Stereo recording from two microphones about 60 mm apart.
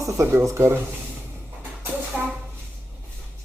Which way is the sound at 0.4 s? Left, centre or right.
Right.